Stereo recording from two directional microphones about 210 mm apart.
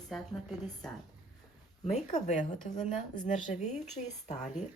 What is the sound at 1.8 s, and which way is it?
Speech, 35° left (ahead or behind).